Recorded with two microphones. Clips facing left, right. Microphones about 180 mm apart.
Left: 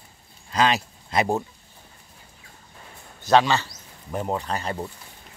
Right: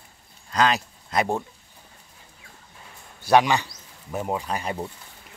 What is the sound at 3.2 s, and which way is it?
A man's voice, 15° right (ahead or behind).